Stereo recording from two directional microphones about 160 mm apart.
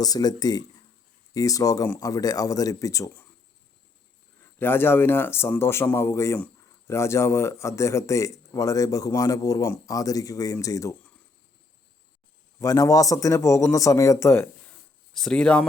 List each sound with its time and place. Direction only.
0.0 s a man's voice: 25° left (ahead or behind)
4.5 s a man's voice: 15° left (ahead or behind)
12.5 s a man's voice: 20° left (ahead or behind); by 15.6 s 5° left (ahead or behind)